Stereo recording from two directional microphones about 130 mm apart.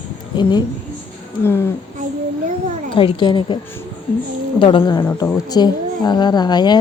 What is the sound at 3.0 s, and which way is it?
Speech, 40° left (ahead or behind).